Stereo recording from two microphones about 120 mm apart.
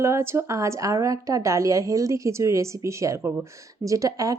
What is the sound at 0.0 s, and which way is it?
A woman's voice, 20° right (ahead or behind).